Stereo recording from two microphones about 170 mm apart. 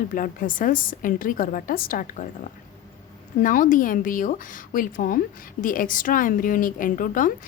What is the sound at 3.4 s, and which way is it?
A woman's voice, 50° left (ahead or behind).